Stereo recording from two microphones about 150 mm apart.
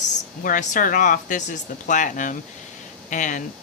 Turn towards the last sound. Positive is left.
turn(degrees=55)  # may be behind; listen again after turning